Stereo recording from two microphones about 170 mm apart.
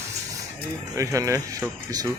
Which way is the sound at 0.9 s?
20° right (ahead or behind).